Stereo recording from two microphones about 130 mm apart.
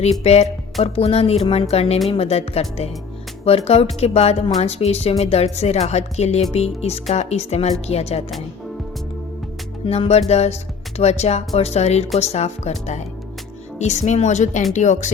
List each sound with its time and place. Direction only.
0.0 s speech: 55° left (ahead or behind)
9.8 s speech: 50° left (ahead or behind)
13.7 s speech: 60° left (ahead or behind)